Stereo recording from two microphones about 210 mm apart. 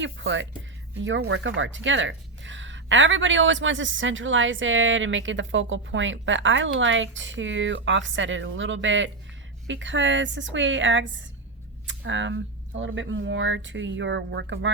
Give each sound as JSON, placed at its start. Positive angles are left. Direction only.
{"t": 0.0, "sound": "speech", "side_deg": -60}